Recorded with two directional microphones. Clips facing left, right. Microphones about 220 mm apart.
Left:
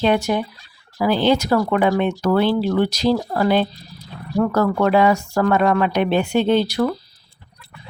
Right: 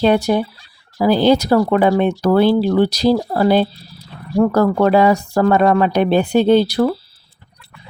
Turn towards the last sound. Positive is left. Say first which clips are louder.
# right 4 dB
turn(degrees=-35)  # may be behind; listen again after turning